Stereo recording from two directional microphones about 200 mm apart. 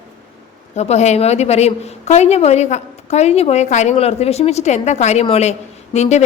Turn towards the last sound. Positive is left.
turn(degrees=35)  # may be behind; listen again after turning